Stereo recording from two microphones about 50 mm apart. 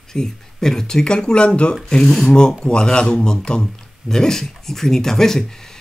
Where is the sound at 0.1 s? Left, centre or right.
Centre.